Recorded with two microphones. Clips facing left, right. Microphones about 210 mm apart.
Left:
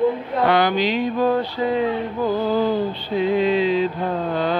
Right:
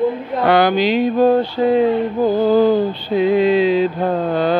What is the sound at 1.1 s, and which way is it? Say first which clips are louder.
Music: right 6 dB; 30° right (ahead or behind).